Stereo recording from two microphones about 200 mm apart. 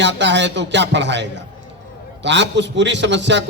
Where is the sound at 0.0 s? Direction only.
60° right (ahead or behind).